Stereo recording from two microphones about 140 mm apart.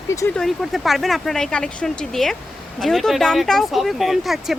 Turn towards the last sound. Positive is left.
turn(degrees=0)  # may be behind; listen again after turning